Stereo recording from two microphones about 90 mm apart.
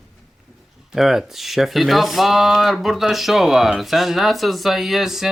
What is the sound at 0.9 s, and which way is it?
Speech, 5° right (ahead or behind).